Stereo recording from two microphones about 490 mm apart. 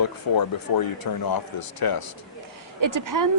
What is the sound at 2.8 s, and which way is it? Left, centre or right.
Speech, right.